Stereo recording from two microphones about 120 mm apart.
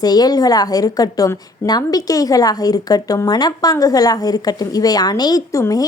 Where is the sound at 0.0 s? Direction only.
35° left (ahead or behind).